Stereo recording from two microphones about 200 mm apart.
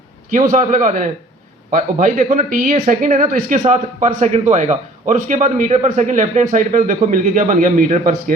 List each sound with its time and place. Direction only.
0.3 s speech: 40° right (ahead or behind)